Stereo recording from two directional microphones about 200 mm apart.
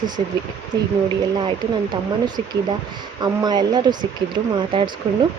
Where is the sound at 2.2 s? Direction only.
20° right (ahead or behind).